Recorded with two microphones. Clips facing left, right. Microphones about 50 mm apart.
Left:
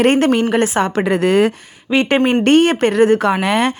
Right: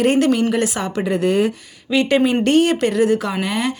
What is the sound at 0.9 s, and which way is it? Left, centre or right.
Speech, left.